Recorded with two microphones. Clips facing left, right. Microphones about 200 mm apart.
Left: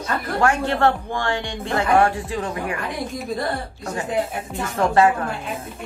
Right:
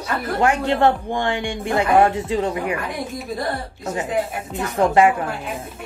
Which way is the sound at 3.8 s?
20° right (ahead or behind).